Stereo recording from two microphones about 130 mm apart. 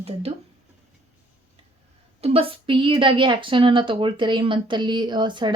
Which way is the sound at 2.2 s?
45° right (ahead or behind).